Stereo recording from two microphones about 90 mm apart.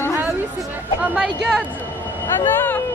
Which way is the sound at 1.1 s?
10° right (ahead or behind).